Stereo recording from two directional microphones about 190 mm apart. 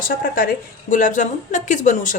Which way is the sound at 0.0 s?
50° left (ahead or behind).